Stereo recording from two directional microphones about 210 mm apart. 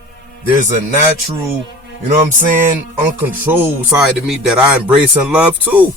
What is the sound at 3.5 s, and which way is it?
A man's voice, 10° right (ahead or behind).